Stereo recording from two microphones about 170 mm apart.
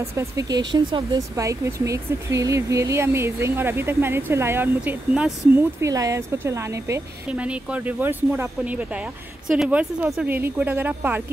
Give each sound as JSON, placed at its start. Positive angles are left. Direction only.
{"t": 0.1, "sound": "speech", "side_deg": -20}
{"t": 5.8, "sound": "speech", "side_deg": -20}